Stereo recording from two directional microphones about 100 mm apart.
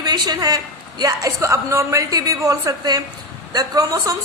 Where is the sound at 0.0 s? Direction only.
40° right (ahead or behind).